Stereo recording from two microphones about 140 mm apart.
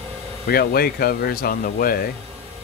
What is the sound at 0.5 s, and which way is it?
Speech, 90° left.